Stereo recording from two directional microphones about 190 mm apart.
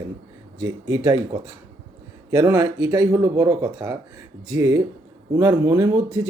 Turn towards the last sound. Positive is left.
turn(degrees=-20)  # may be behind; listen again after turning